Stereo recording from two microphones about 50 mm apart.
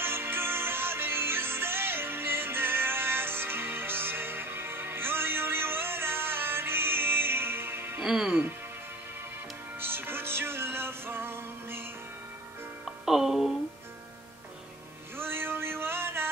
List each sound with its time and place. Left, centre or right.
0.0 s music: right
8.0 s speech: centre
9.8 s music: right
12.8 s music: centre
15.1 s a sound: right